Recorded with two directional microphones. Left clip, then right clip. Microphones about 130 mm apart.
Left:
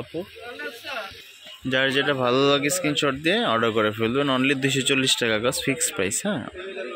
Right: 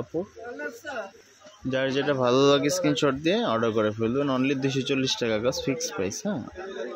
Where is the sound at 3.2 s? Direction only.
10° right (ahead or behind).